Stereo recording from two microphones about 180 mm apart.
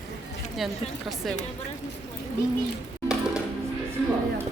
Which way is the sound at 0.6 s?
Centre (ahead or behind).